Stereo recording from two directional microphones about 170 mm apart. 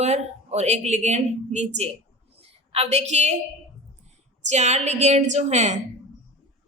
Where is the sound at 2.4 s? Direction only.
40° right (ahead or behind).